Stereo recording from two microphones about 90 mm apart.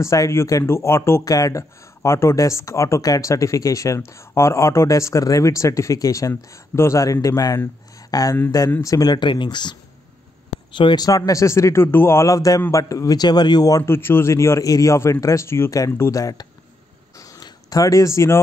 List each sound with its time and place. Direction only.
0.0 s speech: 35° left (ahead or behind)
1.2 s speech: 40° left (ahead or behind); by 11.1 s 60° left (ahead or behind)
11.1 s a man's voice: 40° left (ahead or behind)
13.8 s speech: 25° left (ahead or behind)
16.0 s speech: 40° left (ahead or behind)
17.2 s a sound: 40° left (ahead or behind)